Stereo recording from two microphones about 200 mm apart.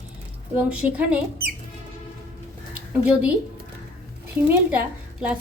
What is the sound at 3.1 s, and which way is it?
Speech, 5° right (ahead or behind).